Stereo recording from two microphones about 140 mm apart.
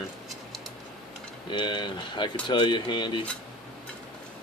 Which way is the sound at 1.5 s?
35° left (ahead or behind).